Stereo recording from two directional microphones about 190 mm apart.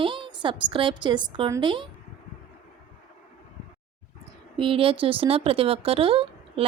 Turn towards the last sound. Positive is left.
turn(degrees=-30)  # may be behind; listen again after turning